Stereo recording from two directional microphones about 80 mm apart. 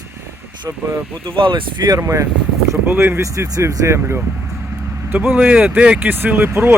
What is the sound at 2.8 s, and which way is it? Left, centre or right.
Speech, right.